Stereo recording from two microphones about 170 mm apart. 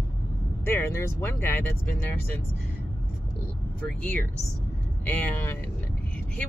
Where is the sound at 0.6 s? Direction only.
15° left (ahead or behind).